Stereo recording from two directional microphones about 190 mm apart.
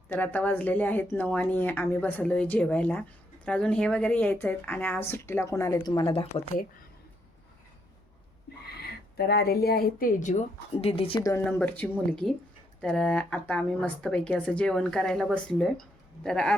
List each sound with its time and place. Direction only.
0.1 s a woman's voice: 10° left (ahead or behind)
9.1 s speech: 55° left (ahead or behind); by 11.2 s 30° left (ahead or behind)
11.2 s a woman's voice: 15° left (ahead or behind)